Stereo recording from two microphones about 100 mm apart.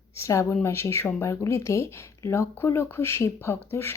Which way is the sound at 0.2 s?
30° left (ahead or behind).